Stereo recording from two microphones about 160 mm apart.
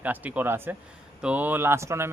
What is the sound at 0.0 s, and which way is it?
Speech, 10° right (ahead or behind).